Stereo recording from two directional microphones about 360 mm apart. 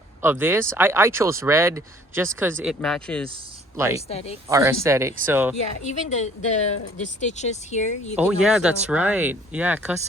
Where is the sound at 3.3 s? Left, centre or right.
Centre.